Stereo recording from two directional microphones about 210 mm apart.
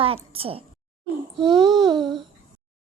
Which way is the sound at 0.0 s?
25° right (ahead or behind).